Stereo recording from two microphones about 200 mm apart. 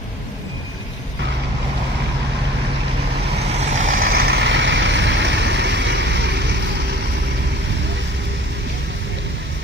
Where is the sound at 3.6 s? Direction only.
35° right (ahead or behind); by 7.0 s 55° right (ahead or behind).